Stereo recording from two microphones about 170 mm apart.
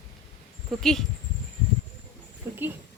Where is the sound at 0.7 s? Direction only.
Centre (ahead or behind).